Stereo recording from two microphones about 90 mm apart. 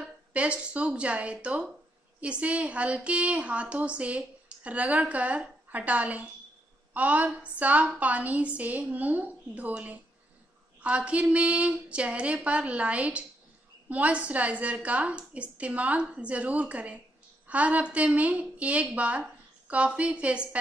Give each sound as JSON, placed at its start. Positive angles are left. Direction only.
{"t": 0.0, "sound": "a woman's voice", "side_deg": -15}